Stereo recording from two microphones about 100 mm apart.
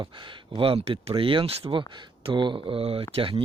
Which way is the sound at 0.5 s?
70° right (ahead or behind).